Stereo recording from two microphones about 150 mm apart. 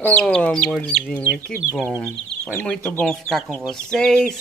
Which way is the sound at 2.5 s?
5° left (ahead or behind).